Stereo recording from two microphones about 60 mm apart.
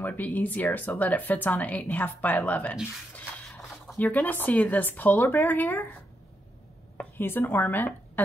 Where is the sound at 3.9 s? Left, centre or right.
Left.